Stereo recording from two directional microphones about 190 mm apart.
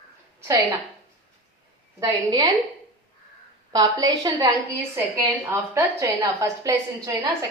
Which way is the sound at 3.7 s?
20° right (ahead or behind).